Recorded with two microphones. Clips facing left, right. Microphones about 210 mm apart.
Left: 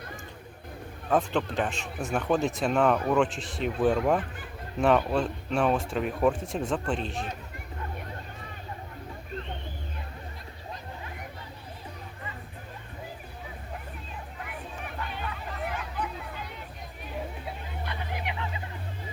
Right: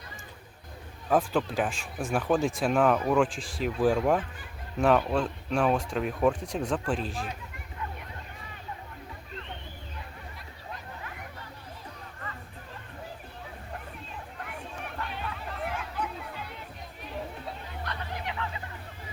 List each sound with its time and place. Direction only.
1.1 s speech: 5° right (ahead or behind)
14.3 s chatter: centre (ahead or behind)
18.1 s a sound: 15° left (ahead or behind)